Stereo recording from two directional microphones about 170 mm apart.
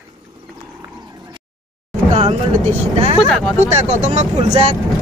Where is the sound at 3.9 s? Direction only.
40° right (ahead or behind).